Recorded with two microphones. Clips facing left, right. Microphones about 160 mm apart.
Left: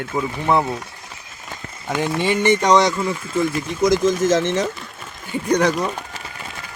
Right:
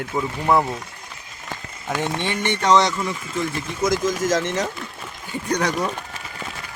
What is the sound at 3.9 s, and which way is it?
Speech, 25° left (ahead or behind).